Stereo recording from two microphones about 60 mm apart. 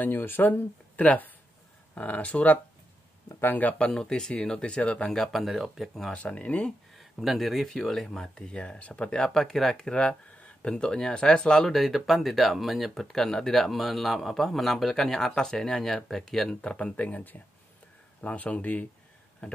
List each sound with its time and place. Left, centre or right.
0.0 s speech: left; by 5.1 s centre
5.1 s speech: centre
6.1 s speech: left
7.0 s speech: centre
16.7 s speech: left